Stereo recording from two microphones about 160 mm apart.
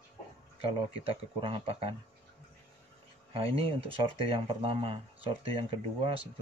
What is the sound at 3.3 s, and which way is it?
Speech, 35° right (ahead or behind).